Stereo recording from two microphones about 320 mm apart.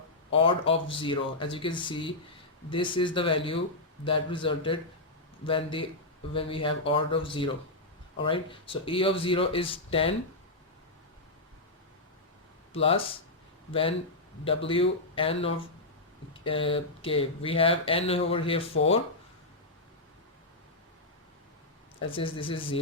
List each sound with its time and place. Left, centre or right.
0.3 s speech: centre
12.7 s speech: centre
22.1 s speech: centre